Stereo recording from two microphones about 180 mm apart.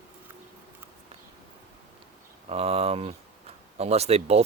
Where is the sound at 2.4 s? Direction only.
35° right (ahead or behind).